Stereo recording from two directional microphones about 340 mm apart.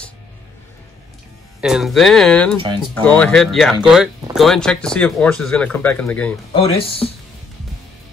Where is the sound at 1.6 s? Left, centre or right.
Centre.